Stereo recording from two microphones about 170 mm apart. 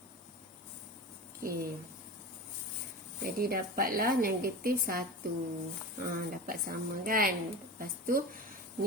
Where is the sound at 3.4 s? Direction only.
60° right (ahead or behind).